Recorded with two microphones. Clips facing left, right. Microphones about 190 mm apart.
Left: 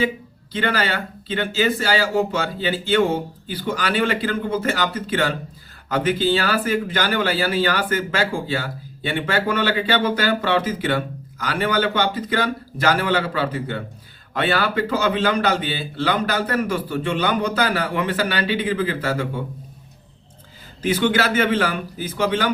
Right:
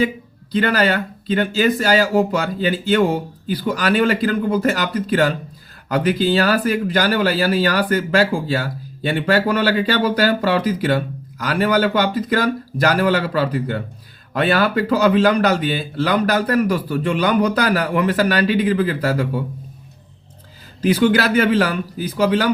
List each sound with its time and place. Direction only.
0.5 s a man's voice: 40° right (ahead or behind)
20.8 s a man's voice: 40° right (ahead or behind)